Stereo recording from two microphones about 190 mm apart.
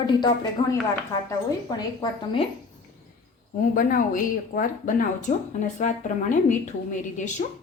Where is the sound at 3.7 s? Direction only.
45° left (ahead or behind).